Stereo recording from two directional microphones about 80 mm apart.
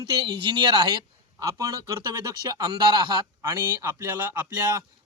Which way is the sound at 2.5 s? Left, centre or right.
Right.